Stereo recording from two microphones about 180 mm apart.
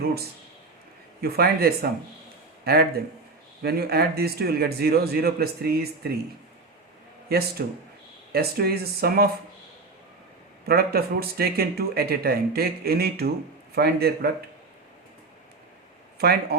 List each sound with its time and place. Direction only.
1.2 s speech: 55° right (ahead or behind)
7.6 s speech: 60° right (ahead or behind)
10.7 s speech: 60° right (ahead or behind)
16.1 s speech: 60° right (ahead or behind)